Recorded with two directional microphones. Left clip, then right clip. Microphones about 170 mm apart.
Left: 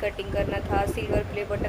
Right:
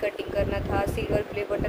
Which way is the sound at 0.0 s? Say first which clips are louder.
Right 1 dB; 5° right (ahead or behind).